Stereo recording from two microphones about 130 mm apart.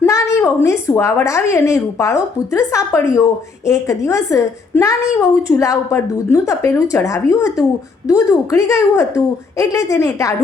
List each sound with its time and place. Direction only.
0.0 s a woman's voice: 20° left (ahead or behind)